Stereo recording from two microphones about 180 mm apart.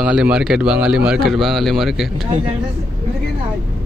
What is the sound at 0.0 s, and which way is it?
Speech, 5° right (ahead or behind).